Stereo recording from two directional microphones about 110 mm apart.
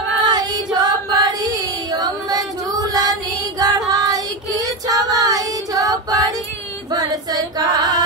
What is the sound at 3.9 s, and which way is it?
Child singing, 35° right (ahead or behind).